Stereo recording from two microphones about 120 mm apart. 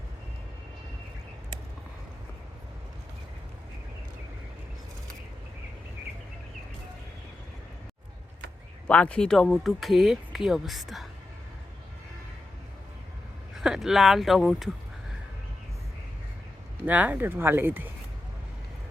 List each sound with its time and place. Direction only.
8.9 s speech: 10° left (ahead or behind)
13.5 s speech: 5° right (ahead or behind)
16.8 s speech: 15° right (ahead or behind)